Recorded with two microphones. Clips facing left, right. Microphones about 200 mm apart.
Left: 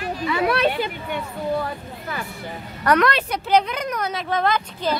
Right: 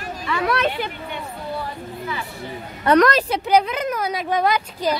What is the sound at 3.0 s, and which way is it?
Speech, 40° right (ahead or behind).